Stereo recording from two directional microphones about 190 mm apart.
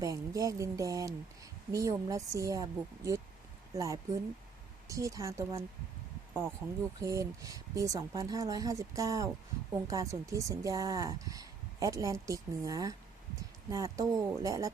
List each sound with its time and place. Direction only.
0.0 s speech: 15° right (ahead or behind)
7.0 s speech: 15° right (ahead or behind)